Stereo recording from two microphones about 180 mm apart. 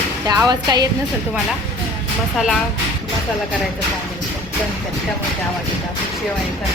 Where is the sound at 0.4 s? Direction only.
20° right (ahead or behind).